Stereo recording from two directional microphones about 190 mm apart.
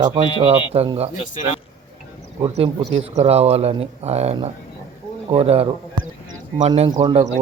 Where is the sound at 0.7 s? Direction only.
30° right (ahead or behind).